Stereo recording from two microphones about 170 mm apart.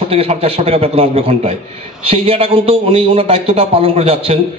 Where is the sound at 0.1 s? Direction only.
35° right (ahead or behind).